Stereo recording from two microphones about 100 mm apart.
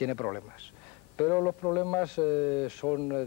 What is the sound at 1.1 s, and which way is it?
Speech, 20° left (ahead or behind).